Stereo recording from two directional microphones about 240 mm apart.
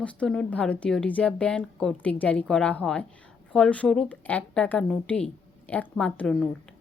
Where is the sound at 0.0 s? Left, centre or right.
Centre.